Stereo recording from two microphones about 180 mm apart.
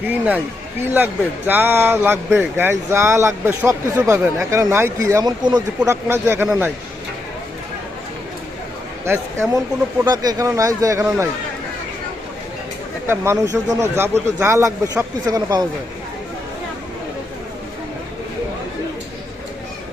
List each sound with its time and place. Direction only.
0.0 s speech: 10° right (ahead or behind)
9.0 s speech: 15° right (ahead or behind)
13.1 s speech: 15° right (ahead or behind)